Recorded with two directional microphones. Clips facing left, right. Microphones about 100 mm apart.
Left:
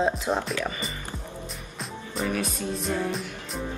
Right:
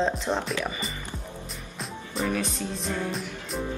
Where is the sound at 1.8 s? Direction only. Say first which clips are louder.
Even; centre (ahead or behind).